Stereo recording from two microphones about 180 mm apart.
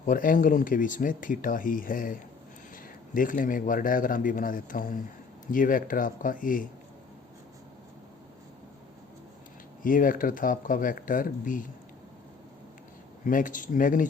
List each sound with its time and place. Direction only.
0.0 s speech: 50° left (ahead or behind)
3.2 s speech: 50° left (ahead or behind)
9.8 s speech: 50° left (ahead or behind)
13.2 s speech: 45° left (ahead or behind)